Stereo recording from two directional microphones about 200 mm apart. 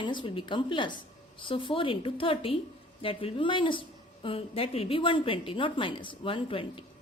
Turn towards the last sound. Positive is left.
turn(degrees=25)  # may be behind; listen again after turning